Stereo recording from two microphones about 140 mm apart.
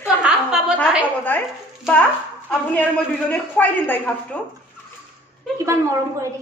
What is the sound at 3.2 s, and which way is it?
Speech, 10° left (ahead or behind).